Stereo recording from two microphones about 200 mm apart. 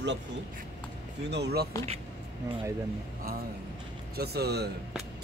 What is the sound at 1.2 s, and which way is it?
Speech, 55° right (ahead or behind).